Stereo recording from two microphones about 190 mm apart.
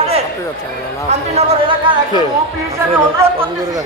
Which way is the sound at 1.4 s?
30° right (ahead or behind).